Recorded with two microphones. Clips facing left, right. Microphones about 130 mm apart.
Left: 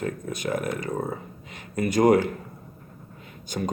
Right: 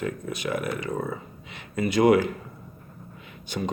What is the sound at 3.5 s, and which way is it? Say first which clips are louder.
Speech: left 1 dB; 45° left (ahead or behind).